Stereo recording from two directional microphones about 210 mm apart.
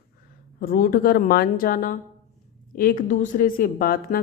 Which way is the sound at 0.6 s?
45° left (ahead or behind).